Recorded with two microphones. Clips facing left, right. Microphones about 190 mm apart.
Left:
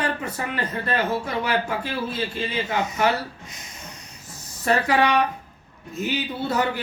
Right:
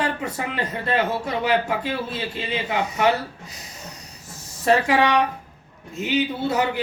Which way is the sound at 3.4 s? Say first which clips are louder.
Right 2 dB; 35° right (ahead or behind).